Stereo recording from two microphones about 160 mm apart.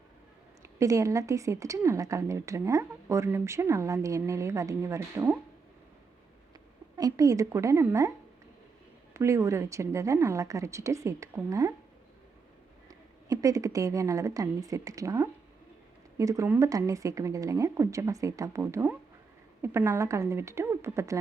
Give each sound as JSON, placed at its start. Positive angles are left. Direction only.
{"t": 0.6, "sound": "a woman's voice", "side_deg": -20}
{"t": 6.9, "sound": "a woman's voice", "side_deg": -20}
{"t": 9.1, "sound": "a woman's voice", "side_deg": -20}
{"t": 12.9, "sound": "a woman's voice", "side_deg": -20}